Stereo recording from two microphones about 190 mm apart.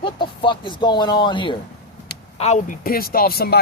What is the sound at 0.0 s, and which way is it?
Speech, 25° left (ahead or behind).